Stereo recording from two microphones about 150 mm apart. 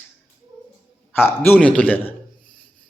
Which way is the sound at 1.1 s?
15° left (ahead or behind).